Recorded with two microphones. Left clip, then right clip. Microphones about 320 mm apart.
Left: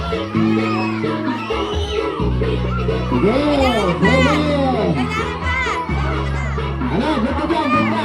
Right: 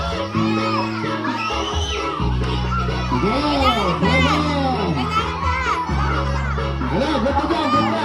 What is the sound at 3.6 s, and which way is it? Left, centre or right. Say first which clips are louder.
Music: left 2 dB; left.